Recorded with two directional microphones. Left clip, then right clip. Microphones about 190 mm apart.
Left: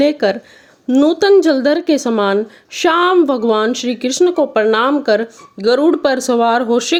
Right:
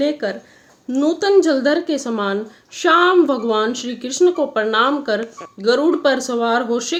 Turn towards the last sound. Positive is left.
turn(degrees=40)  # may be behind; listen again after turning